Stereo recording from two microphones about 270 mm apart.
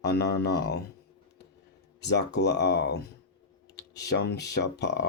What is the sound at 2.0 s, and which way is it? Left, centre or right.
Speech, left.